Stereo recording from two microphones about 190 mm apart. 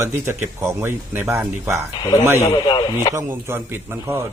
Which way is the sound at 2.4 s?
20° left (ahead or behind).